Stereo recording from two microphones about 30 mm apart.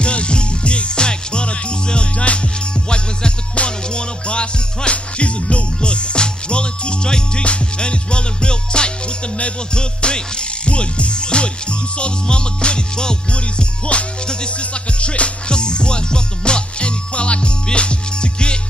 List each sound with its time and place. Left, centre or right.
0.0 s music: left
13.3 s music: left